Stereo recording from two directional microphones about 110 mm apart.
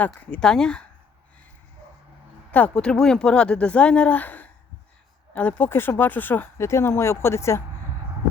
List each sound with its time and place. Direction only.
0.0 s speech: 10° left (ahead or behind)
2.5 s speech: 15° left (ahead or behind)